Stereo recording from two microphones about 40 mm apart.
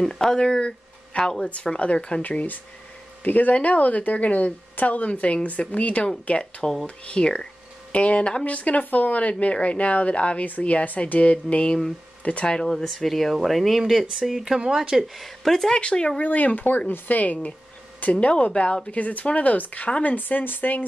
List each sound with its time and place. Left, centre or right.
0.0 s speech: centre; by 2.2 s left
2.2 s a woman's voice: left
7.1 s a woman's voice: left
12.7 s speech: centre
15.7 s speech: left
16.2 s a woman's voice: left
18.2 s speech: left
18.9 s a woman's voice: left
20.2 s speech: left